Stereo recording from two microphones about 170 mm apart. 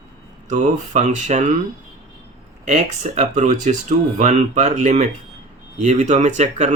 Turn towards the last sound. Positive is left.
turn(degrees=-45)  # may be behind; listen again after turning